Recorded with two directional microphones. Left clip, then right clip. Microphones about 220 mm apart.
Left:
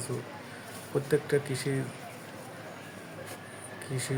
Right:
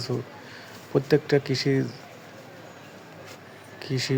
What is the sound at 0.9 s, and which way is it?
Speech, 25° right (ahead or behind).